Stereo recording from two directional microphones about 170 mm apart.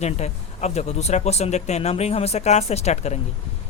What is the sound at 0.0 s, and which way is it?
Speech, 40° left (ahead or behind).